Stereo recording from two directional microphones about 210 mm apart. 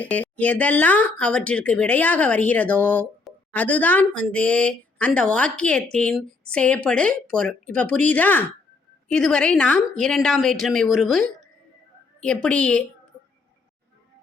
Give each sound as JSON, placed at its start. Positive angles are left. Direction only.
{"t": 0.0, "sound": "a woman's voice", "side_deg": 5}